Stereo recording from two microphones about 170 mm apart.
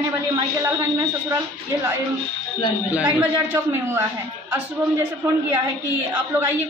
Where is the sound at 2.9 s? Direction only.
10° right (ahead or behind).